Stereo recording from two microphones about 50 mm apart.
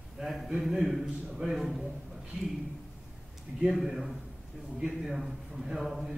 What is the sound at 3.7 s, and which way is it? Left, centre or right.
A man's voice, centre.